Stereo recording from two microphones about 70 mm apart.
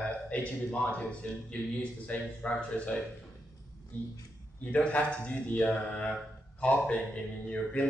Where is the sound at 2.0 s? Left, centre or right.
Left.